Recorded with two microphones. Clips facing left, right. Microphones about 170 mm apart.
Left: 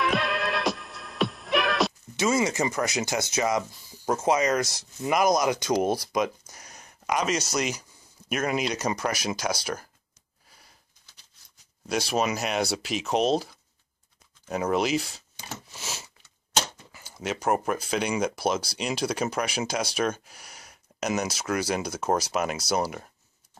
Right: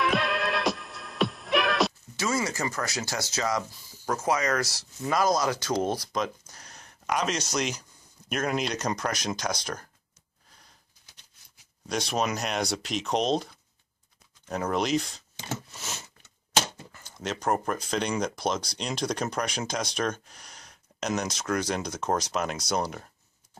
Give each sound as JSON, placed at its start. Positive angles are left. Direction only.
{"t": 0.0, "sound": "music", "side_deg": 0}
{"t": 2.1, "sound": "speech", "side_deg": 20}
{"t": 11.9, "sound": "speech", "side_deg": 5}
{"t": 14.5, "sound": "speech", "side_deg": 5}
{"t": 15.7, "sound": "sniff", "side_deg": 5}
{"t": 16.9, "sound": "speech", "side_deg": 5}